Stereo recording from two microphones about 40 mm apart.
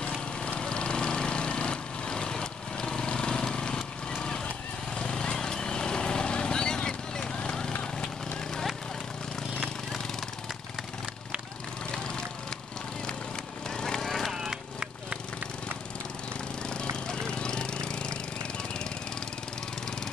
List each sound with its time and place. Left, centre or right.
0.5 s lawn mower: left
4.9 s vehicle: left
13.7 s vehicle: centre
14.0 s vehicle: centre
14.3 s a sound: centre
17.1 s a sound: left